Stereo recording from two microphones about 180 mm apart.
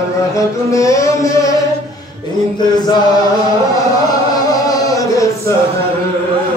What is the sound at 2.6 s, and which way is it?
Mantra, 25° left (ahead or behind).